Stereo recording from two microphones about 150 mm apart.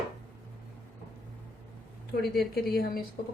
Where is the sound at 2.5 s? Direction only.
90° left.